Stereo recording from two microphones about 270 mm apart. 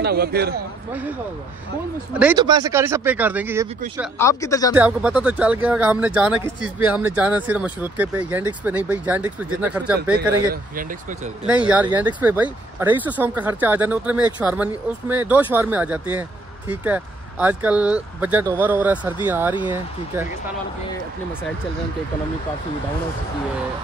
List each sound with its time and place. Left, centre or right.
0.0 s a man's voice: right
2.1 s speech: centre
4.2 s speech: centre
4.7 s speech: centre
10.5 s speech: right
11.4 s speech: centre